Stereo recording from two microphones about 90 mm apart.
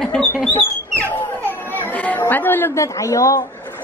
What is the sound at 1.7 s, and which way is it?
Chatter, 20° left (ahead or behind).